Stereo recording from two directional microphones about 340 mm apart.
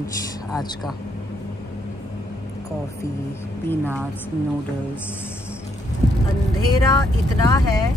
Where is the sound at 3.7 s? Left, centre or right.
Centre.